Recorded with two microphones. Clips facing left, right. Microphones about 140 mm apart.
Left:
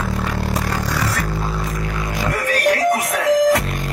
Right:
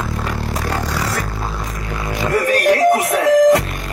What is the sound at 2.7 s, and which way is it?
Music, 25° right (ahead or behind).